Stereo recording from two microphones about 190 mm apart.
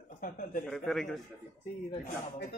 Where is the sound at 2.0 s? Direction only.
45° left (ahead or behind).